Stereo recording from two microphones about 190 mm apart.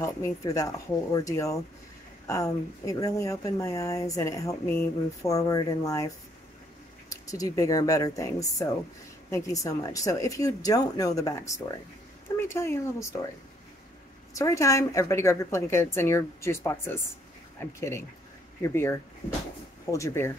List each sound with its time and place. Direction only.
0.0 s speech: 15° left (ahead or behind)
14.3 s speech: 15° left (ahead or behind)